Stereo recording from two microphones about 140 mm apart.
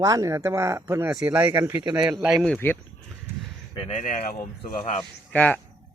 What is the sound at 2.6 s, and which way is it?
Speech, 15° left (ahead or behind).